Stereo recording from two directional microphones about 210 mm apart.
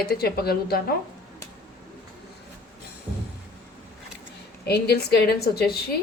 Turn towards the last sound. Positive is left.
turn(degrees=50)  # may be behind; listen again after turning